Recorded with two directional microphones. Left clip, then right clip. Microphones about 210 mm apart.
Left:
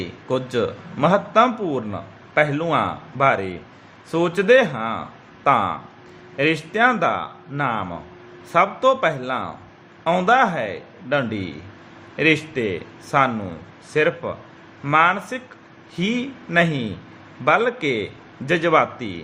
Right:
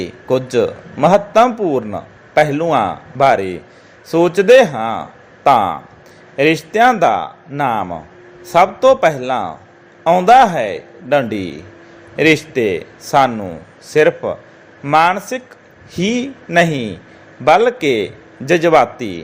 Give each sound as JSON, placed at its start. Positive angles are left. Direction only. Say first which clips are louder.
{"t": 0.0, "sound": "a man's voice", "louder": "right 7 dB", "side_deg": -15}